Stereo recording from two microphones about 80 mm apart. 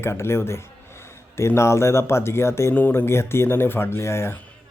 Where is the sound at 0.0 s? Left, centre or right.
Left.